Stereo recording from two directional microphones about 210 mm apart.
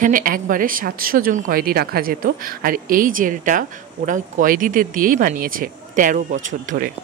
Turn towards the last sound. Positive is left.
turn(degrees=-40)  # may be behind; listen again after turning